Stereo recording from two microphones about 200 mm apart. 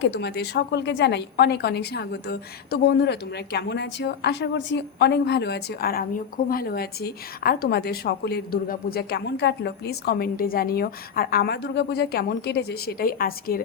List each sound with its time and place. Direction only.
0.0 s a woman's voice: 55° left (ahead or behind)